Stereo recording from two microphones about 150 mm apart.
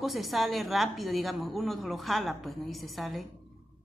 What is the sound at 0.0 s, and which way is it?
A woman's voice, centre (ahead or behind).